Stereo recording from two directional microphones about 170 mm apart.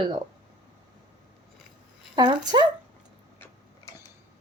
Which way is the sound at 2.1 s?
25° right (ahead or behind).